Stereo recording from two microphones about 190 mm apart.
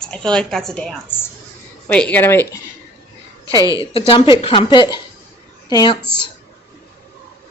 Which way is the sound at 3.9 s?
25° left (ahead or behind).